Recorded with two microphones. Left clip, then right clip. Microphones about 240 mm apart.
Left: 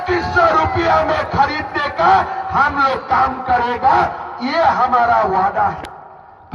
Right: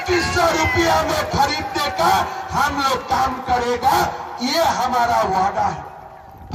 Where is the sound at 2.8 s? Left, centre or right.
Right.